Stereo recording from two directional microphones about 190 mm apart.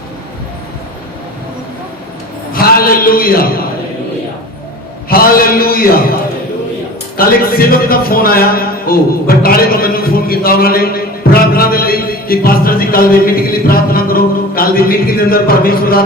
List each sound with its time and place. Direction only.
2.5 s a man's voice: 50° left (ahead or behind)
5.0 s a man's voice: 50° left (ahead or behind)
7.2 s a man's voice: 50° left (ahead or behind)